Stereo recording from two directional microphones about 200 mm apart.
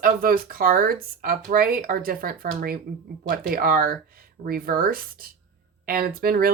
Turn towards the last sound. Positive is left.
turn(degrees=-45)  # may be behind; listen again after turning